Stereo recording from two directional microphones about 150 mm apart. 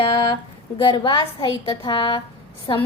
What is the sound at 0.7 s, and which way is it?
A woman's voice, 30° left (ahead or behind).